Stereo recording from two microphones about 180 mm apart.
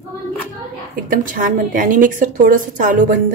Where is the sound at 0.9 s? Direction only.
50° right (ahead or behind).